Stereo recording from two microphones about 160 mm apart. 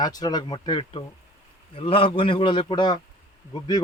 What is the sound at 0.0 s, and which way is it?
A man's voice, 25° left (ahead or behind).